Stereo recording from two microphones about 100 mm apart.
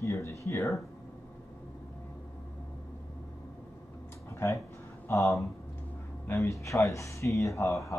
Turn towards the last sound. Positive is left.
turn(degrees=30)  # may be behind; listen again after turning